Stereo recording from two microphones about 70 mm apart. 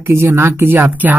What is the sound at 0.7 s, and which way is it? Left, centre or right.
Speech, right.